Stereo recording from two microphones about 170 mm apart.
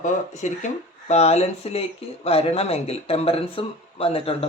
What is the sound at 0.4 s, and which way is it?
Speech, 45° left (ahead or behind).